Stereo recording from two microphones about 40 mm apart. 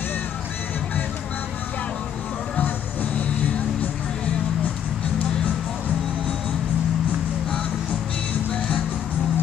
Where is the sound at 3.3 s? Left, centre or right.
Left.